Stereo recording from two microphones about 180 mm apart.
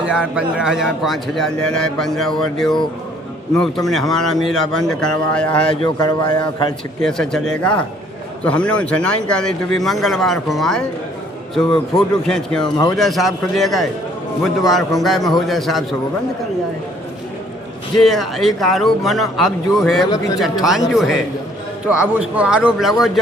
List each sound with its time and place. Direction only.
0.3 s a man's voice: 5° right (ahead or behind)
5.8 s speech: 20° left (ahead or behind)
7.0 s a man's voice: 5° left (ahead or behind)
14.9 s a man's voice: centre (ahead or behind)
17.9 s a man's voice: centre (ahead or behind)